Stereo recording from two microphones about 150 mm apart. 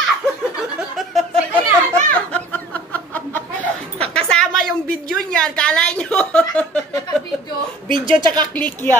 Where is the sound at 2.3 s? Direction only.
10° left (ahead or behind).